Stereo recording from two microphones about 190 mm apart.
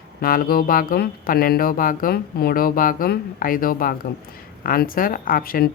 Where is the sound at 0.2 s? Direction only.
50° left (ahead or behind).